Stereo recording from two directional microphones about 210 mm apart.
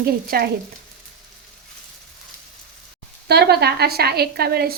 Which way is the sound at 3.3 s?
50° right (ahead or behind).